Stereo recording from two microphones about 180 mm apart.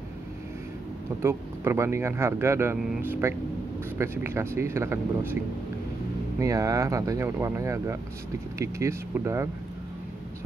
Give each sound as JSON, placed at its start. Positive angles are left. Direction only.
{"t": 1.2, "sound": "speech", "side_deg": -15}
{"t": 6.4, "sound": "speech", "side_deg": -20}